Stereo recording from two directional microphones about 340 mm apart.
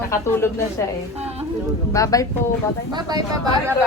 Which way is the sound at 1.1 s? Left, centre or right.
Centre.